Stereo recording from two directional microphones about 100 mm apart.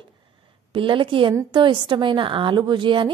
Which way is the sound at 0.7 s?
55° right (ahead or behind).